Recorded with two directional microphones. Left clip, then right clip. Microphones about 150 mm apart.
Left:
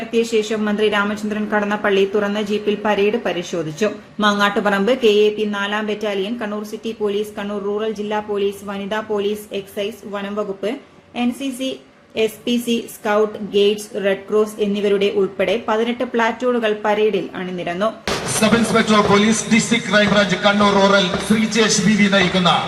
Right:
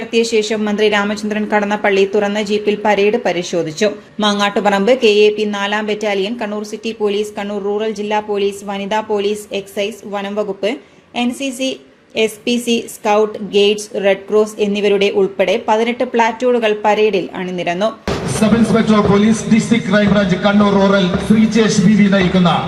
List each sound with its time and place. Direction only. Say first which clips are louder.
0.1 s a woman's voice: right 4 dB; 35° right (ahead or behind)
18.1 s speech: right 1 dB; 10° right (ahead or behind)